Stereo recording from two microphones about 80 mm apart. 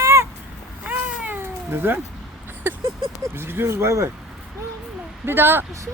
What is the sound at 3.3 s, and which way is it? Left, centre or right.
Speech, right.